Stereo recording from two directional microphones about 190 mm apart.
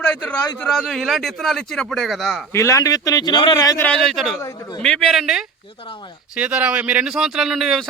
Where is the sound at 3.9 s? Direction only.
Centre (ahead or behind).